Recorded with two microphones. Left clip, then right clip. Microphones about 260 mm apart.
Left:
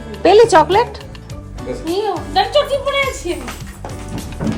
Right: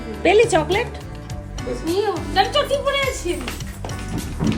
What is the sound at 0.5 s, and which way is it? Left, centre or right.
Speech, left.